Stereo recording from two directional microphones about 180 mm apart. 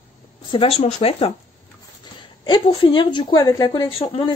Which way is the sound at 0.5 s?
35° left (ahead or behind).